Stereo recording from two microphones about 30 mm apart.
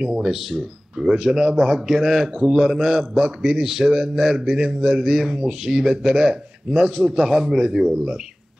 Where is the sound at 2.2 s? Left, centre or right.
Right.